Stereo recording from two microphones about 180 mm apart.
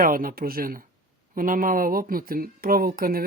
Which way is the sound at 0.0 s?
50° right (ahead or behind).